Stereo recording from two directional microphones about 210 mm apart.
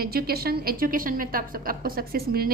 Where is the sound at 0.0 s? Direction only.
45° right (ahead or behind).